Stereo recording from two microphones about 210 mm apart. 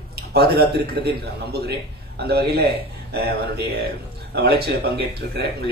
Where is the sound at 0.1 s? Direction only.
50° right (ahead or behind).